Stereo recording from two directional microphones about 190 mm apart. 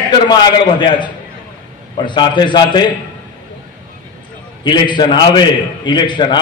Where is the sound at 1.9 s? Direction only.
25° left (ahead or behind).